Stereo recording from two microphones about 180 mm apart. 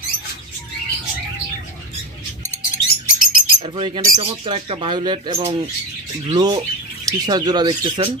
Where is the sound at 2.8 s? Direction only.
50° left (ahead or behind).